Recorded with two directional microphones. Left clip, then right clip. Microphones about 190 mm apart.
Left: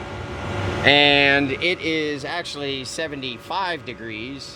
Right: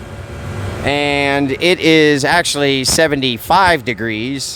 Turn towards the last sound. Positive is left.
turn(degrees=-40)  # may be behind; listen again after turning